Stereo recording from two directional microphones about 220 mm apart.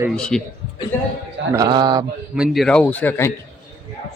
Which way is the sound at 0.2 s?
5° left (ahead or behind).